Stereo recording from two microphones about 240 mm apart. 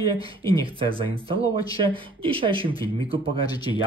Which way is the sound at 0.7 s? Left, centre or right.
Right.